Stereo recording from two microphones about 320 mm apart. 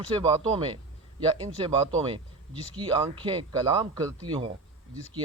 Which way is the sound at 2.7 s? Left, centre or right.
Centre.